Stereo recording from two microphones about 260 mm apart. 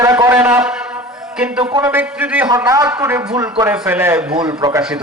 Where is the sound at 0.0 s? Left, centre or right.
Centre.